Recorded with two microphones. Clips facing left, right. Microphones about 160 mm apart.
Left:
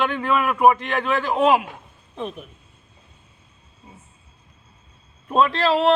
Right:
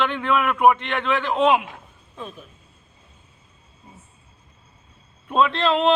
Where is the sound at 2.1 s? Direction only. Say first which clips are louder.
Left 6 dB; 20° left (ahead or behind).